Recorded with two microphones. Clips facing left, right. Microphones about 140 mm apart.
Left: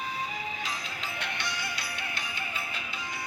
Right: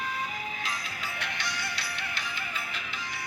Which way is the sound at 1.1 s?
20° left (ahead or behind).